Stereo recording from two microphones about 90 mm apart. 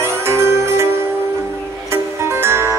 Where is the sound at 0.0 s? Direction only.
30° right (ahead or behind).